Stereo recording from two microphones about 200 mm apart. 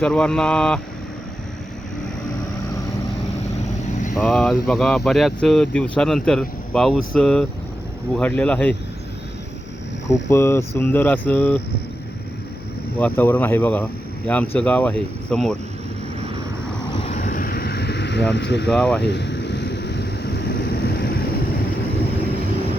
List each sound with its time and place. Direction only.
0.0 s speech: 5° left (ahead or behind)
4.1 s speech: centre (ahead or behind)
10.1 s speech: 15° left (ahead or behind)
13.0 s speech: 10° left (ahead or behind)
16.9 s vehicle: 30° left (ahead or behind); by 18.7 s 60° left (ahead or behind)
18.7 s speech: 5° left (ahead or behind)
19.0 s vehicle: 60° left (ahead or behind)